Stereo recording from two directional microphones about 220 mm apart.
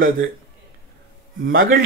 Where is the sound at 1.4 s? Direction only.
40° right (ahead or behind).